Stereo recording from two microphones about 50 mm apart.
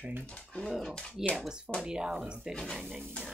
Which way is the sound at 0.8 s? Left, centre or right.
Centre.